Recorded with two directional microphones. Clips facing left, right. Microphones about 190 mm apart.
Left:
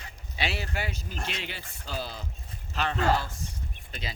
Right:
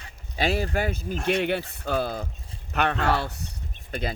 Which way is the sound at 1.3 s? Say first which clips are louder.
Right 14 dB; 60° right (ahead or behind).